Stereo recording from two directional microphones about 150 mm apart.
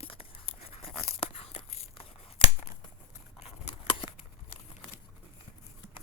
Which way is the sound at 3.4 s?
45° left (ahead or behind).